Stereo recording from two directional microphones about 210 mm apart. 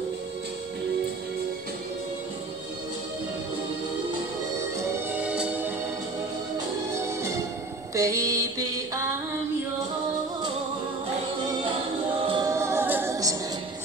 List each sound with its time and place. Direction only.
4.6 s music: 10° right (ahead or behind)
6.9 s music: 15° right (ahead or behind)
12.3 s music: 15° right (ahead or behind)